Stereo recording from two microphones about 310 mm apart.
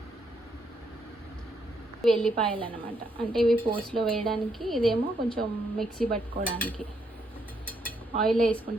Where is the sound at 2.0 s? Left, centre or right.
Centre.